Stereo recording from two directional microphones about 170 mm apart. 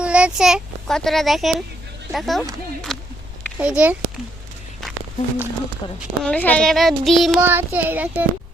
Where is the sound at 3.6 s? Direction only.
10° right (ahead or behind).